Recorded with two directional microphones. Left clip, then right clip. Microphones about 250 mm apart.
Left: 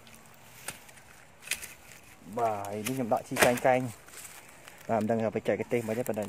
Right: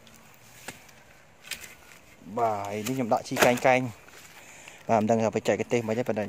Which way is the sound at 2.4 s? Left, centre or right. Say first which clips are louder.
Right 3 dB; centre.